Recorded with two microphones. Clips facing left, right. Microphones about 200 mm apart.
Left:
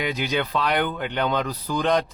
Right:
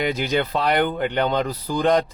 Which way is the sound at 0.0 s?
50° right (ahead or behind).